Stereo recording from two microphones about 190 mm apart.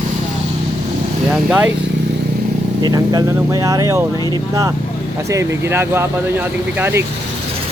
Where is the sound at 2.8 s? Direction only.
20° right (ahead or behind).